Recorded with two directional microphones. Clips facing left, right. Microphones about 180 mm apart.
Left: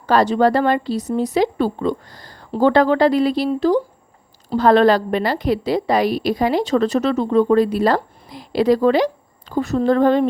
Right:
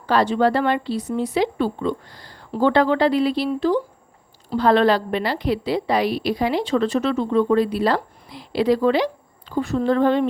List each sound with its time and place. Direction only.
0.0 s a woman's voice: 45° left (ahead or behind)